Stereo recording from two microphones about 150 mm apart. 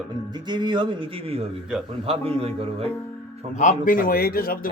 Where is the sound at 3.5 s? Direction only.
60° left (ahead or behind); by 4.7 s 75° left (ahead or behind).